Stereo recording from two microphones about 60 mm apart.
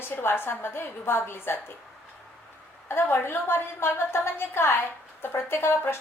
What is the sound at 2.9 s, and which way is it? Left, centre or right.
A woman's voice, left.